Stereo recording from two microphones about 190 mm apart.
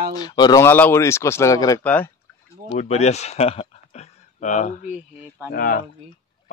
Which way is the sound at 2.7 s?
35° left (ahead or behind).